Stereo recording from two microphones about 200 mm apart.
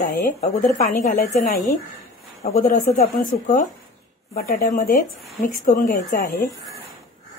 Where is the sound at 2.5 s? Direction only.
40° left (ahead or behind).